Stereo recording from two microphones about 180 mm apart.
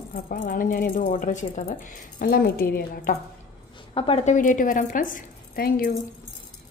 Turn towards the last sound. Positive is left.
turn(degrees=55)  # may be behind; listen again after turning